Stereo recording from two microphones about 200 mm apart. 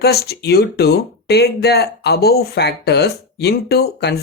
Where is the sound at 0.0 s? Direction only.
55° left (ahead or behind).